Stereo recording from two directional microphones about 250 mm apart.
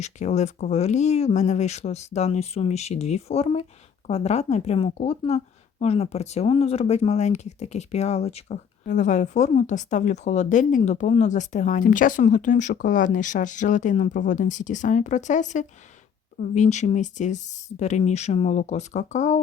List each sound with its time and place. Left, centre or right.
0.0 s speech: left